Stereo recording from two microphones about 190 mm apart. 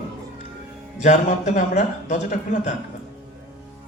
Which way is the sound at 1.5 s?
40° left (ahead or behind).